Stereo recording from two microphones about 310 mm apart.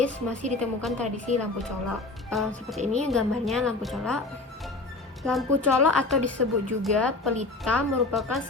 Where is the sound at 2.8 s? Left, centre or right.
Right.